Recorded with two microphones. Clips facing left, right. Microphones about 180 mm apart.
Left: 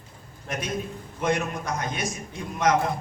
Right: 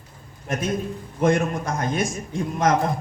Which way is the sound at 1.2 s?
50° right (ahead or behind).